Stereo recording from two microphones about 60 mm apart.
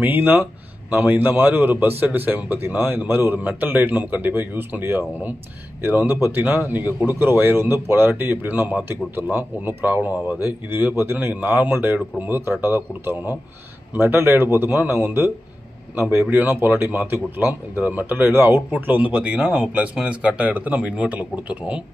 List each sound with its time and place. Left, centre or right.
0.0 s a man's voice: right
17.7 s a man's voice: right